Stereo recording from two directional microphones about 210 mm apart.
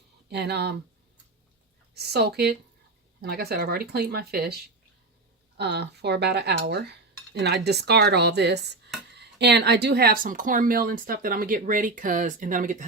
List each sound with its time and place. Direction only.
0.3 s speech: 50° right (ahead or behind)
2.0 s speech: 50° right (ahead or behind)